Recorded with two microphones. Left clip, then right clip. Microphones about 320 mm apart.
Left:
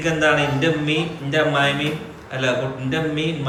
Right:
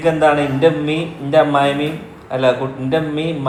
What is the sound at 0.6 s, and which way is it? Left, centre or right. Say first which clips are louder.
Speech: right 5 dB; centre.